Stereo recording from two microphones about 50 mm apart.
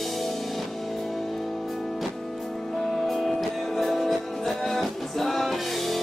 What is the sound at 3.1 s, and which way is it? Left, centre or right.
Music, centre.